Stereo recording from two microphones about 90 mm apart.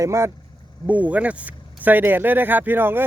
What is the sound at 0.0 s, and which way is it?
Speech, 35° right (ahead or behind).